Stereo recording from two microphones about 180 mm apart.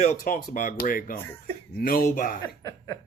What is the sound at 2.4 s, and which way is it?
Speech, 15° left (ahead or behind).